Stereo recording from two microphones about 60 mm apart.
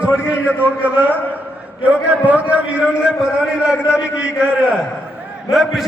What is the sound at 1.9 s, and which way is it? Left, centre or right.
A man's voice, right.